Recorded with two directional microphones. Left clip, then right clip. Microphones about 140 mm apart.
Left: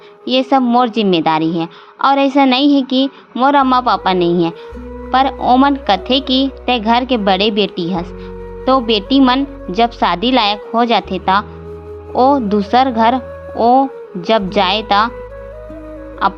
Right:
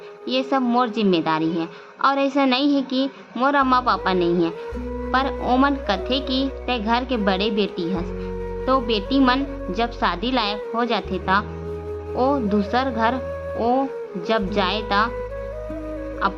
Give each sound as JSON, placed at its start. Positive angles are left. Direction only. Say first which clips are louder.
{"t": 0.3, "sound": "a woman's voice", "louder": "left 8 dB", "side_deg": 45}
{"t": 16.2, "sound": "a woman's voice", "louder": "left 8 dB", "side_deg": 50}